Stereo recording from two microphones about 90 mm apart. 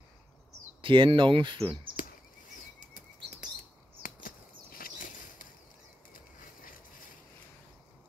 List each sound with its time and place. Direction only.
0.8 s speech: 65° right (ahead or behind)